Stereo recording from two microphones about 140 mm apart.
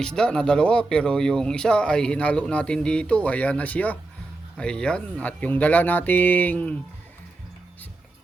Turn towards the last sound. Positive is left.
turn(degrees=10)  # may be behind; listen again after turning